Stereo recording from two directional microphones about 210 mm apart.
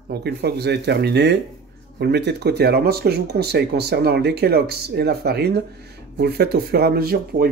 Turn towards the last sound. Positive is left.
turn(degrees=-45)  # may be behind; listen again after turning